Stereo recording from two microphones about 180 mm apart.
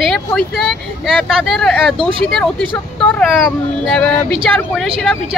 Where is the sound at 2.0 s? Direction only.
30° right (ahead or behind).